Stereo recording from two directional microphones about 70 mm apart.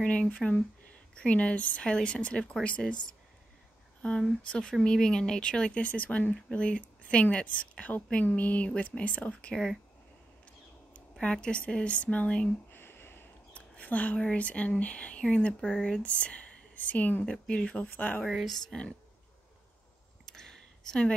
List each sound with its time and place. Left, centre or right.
0.0 s speech: centre
4.4 s speech: centre
10.9 s a sound: centre
11.4 s speech: centre
12.7 s a sound: left
13.5 s speech: left
18.2 s speech: centre
18.7 s speech: centre
20.2 s a sound: centre